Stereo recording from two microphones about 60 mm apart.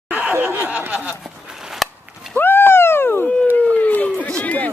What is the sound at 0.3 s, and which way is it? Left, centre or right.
Snicker, right.